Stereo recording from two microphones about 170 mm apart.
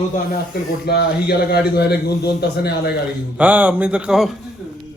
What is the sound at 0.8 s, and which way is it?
A man's voice, 70° left (ahead or behind).